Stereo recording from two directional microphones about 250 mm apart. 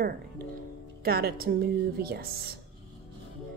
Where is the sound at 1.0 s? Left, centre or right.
Right.